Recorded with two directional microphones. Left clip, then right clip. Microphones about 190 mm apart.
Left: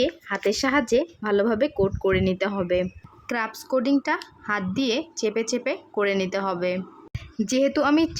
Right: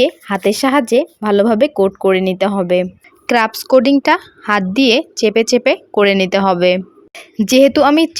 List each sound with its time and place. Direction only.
0.0 s speech: 35° right (ahead or behind)